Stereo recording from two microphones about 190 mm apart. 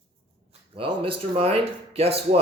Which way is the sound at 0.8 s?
30° right (ahead or behind).